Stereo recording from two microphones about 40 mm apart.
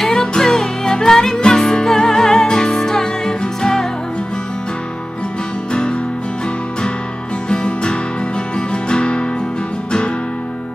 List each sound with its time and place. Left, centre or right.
0.0 s music: centre
5.7 s music: left
7.4 s music: left